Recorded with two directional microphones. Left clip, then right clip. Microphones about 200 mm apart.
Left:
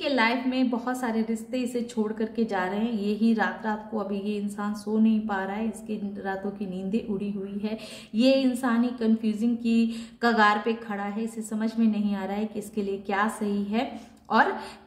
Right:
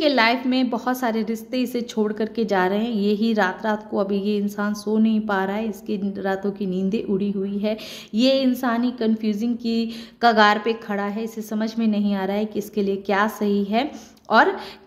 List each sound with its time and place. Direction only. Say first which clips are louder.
0.0 s a woman's voice: right 6 dB; 45° right (ahead or behind)